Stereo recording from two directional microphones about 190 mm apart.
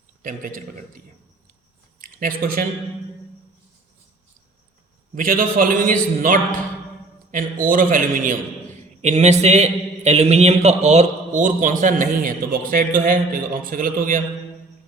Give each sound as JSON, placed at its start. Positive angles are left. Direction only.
{"t": 0.2, "sound": "a man's voice", "side_deg": -45}
{"t": 5.1, "sound": "a man's voice", "side_deg": -45}